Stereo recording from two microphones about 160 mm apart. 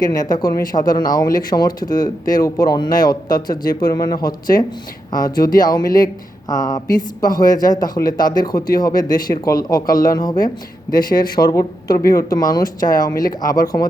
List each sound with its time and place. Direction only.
0.0 s speech: 25° left (ahead or behind)